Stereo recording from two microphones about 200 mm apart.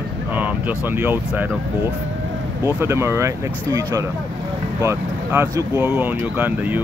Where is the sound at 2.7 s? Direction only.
15° right (ahead or behind).